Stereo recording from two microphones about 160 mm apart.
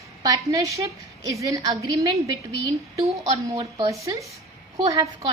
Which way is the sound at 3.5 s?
25° right (ahead or behind).